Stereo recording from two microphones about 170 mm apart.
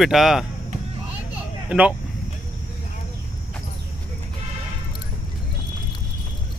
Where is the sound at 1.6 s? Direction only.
5° right (ahead or behind).